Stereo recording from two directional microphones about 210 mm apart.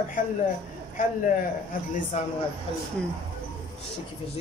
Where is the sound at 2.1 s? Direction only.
35° left (ahead or behind).